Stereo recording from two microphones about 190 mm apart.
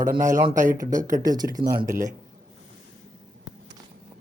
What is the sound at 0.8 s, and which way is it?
Speech, 20° right (ahead or behind).